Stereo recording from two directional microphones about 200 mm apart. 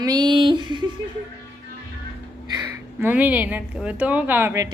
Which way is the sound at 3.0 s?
10° right (ahead or behind).